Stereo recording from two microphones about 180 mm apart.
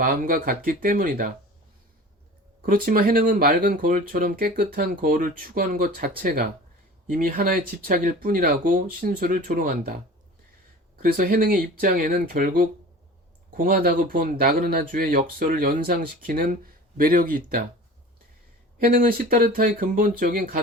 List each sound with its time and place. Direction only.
0.0 s speech: 50° right (ahead or behind)
2.6 s speech: 55° right (ahead or behind)
10.9 s speech: 55° right (ahead or behind)
18.8 s speech: 50° right (ahead or behind)